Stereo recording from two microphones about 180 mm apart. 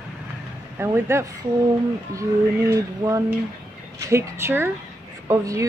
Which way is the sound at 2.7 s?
20° right (ahead or behind).